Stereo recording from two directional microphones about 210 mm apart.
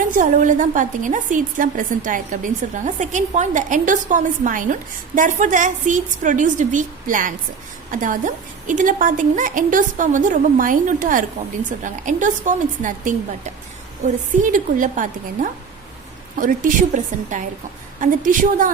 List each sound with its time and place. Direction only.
0.0 s a woman's voice: 40° right (ahead or behind)